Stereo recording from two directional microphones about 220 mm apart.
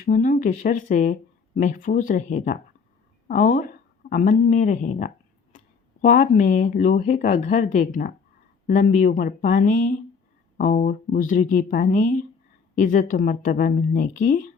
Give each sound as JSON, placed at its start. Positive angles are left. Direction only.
{"t": 0.0, "sound": "speech", "side_deg": 35}